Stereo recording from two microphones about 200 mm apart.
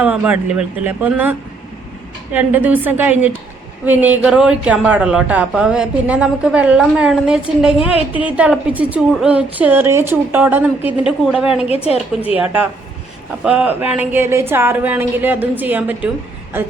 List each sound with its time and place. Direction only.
0.0 s a woman's voice: 5° right (ahead or behind)
7.8 s a woman's voice: 25° left (ahead or behind)
8.2 s a woman's voice: 5° right (ahead or behind)
11.7 s a woman's voice: 30° left (ahead or behind)
13.4 s a woman's voice: 5° right (ahead or behind)